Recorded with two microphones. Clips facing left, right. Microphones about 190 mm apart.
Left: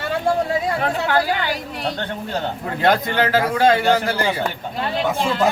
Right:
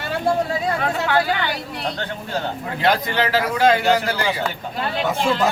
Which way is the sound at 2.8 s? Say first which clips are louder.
Left 2 dB; 45° left (ahead or behind).